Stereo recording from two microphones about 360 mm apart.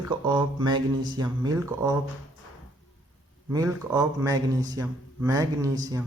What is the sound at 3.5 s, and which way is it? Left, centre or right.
A man's voice, centre.